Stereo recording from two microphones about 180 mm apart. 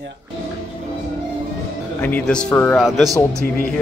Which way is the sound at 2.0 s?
5° left (ahead or behind).